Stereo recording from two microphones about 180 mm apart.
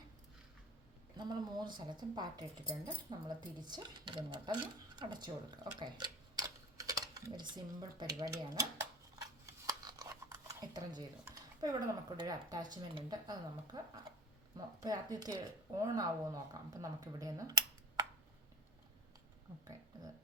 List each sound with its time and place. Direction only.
1.1 s speech: 25° right (ahead or behind)
9.6 s a sound: 20° right (ahead or behind)
11.6 s speech: 20° right (ahead or behind)